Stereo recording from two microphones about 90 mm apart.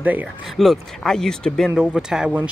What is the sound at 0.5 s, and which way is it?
Speech, centre (ahead or behind).